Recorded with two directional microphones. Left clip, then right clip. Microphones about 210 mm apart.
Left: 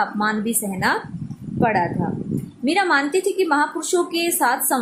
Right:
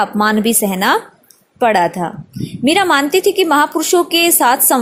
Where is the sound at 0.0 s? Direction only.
40° right (ahead or behind).